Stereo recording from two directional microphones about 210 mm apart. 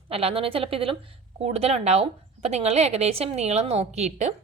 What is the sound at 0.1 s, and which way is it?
A woman's voice, 25° right (ahead or behind).